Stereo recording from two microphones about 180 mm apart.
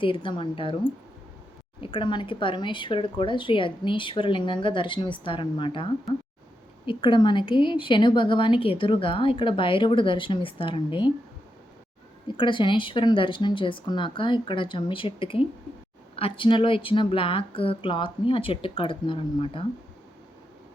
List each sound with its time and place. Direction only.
0.0 s a woman's voice: 30° left (ahead or behind)
1.8 s a woman's voice: 25° left (ahead or behind)
12.4 s a woman's voice: 25° left (ahead or behind)